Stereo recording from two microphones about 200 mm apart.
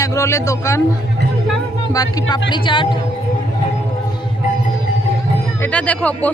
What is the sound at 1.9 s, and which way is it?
Speech, 20° left (ahead or behind).